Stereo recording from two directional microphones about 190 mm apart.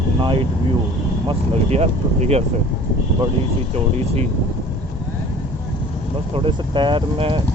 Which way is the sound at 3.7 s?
35° right (ahead or behind).